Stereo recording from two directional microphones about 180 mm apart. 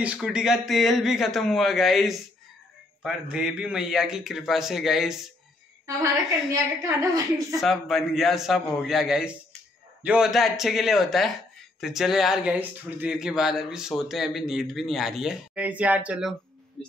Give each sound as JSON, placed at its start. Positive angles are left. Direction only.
{"t": 0.0, "sound": "speech", "side_deg": -5}
{"t": 6.5, "sound": "a woman's voice", "side_deg": -15}
{"t": 7.6, "sound": "a woman's voice", "side_deg": 0}